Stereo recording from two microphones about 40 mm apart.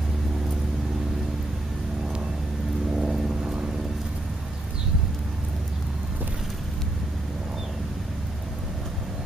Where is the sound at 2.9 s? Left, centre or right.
Centre.